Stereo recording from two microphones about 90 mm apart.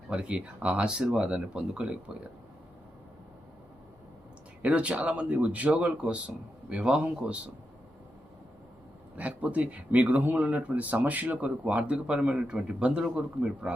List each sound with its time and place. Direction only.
0.1 s speech: 10° right (ahead or behind)
4.6 s speech: 15° right (ahead or behind)
9.1 s speech: 15° right (ahead or behind)